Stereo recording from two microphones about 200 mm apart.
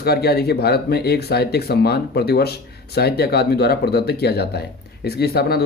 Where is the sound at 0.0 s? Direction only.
50° left (ahead or behind).